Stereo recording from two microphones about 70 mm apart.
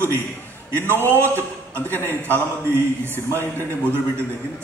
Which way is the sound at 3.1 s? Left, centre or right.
Left.